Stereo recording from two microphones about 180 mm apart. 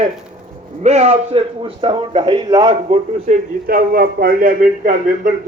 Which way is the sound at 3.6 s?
55° right (ahead or behind).